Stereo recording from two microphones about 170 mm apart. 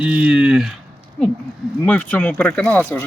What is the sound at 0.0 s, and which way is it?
Speech, 10° right (ahead or behind).